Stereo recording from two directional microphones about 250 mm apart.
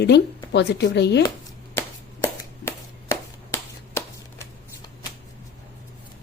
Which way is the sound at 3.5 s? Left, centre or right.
Centre.